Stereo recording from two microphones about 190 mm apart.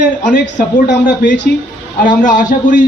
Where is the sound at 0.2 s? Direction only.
40° left (ahead or behind).